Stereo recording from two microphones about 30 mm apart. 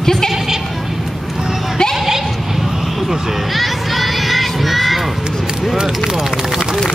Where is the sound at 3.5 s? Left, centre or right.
Centre.